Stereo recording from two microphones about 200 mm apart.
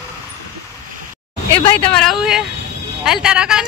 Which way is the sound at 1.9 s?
Centre (ahead or behind).